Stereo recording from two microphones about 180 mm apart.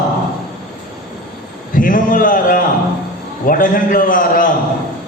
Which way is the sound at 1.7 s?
50° left (ahead or behind).